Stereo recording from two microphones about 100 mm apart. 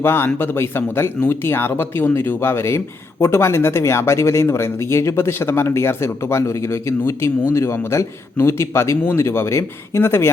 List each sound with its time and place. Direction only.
0.0 s speech: 25° left (ahead or behind)
7.5 s speech: 30° left (ahead or behind)